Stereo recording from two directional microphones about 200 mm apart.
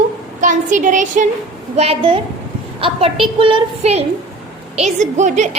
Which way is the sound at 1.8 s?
30° right (ahead or behind).